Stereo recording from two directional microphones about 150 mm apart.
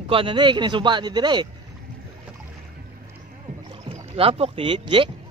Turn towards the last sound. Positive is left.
turn(degrees=-35)  # may be behind; listen again after turning